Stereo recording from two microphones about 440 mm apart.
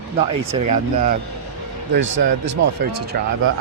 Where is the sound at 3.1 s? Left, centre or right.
Right.